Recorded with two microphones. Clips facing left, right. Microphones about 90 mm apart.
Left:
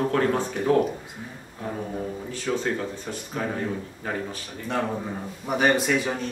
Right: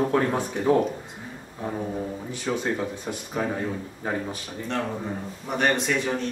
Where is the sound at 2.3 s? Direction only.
15° right (ahead or behind).